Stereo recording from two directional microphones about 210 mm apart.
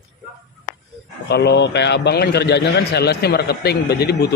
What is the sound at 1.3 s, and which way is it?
A man's voice, 55° left (ahead or behind).